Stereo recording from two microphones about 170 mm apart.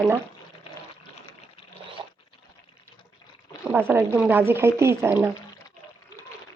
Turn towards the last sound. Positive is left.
turn(degrees=-10)  # may be behind; listen again after turning